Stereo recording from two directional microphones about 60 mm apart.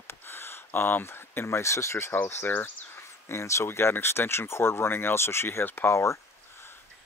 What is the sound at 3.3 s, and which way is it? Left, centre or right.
Speech, left.